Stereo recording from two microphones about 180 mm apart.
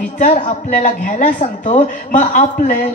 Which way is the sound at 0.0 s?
45° left (ahead or behind).